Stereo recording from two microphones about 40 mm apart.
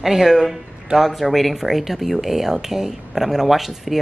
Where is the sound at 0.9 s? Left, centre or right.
Centre.